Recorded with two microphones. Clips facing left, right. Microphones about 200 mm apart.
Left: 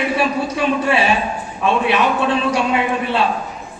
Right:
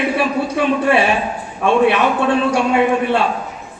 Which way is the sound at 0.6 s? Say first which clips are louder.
Right 3 dB; 55° right (ahead or behind).